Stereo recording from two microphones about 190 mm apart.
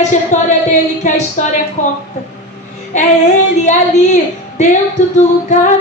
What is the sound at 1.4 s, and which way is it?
Speech, 40° left (ahead or behind).